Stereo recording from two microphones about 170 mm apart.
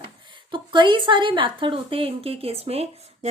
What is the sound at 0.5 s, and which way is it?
A woman's voice, 25° right (ahead or behind).